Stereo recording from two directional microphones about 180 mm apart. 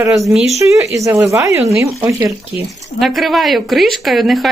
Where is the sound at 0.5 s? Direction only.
15° right (ahead or behind).